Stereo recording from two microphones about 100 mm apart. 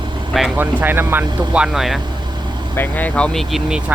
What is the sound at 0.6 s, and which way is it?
Speech, 20° right (ahead or behind).